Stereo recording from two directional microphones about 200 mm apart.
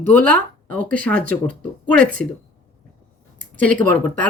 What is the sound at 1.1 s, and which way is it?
Speech, 45° right (ahead or behind).